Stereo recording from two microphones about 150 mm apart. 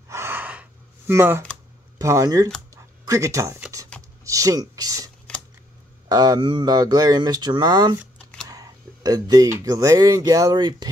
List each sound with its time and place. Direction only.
0.1 s gasp: 15° right (ahead or behind)
2.0 s speech: 20° right (ahead or behind)
2.7 s dog: 20° right (ahead or behind)
4.2 s speech: 20° right (ahead or behind)